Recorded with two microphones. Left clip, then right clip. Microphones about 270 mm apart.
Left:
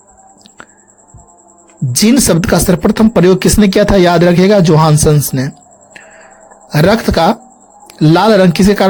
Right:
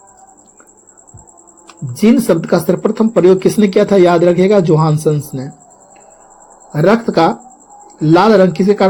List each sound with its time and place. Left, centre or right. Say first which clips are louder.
2.0 s speech: even; left
6.7 s speech: left 1 dB; left